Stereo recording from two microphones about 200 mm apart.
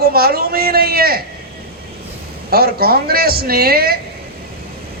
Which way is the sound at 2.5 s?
50° right (ahead or behind).